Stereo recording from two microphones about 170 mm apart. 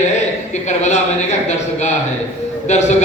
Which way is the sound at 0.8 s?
45° left (ahead or behind).